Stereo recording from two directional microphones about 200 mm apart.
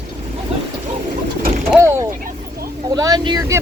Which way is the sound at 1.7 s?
15° right (ahead or behind).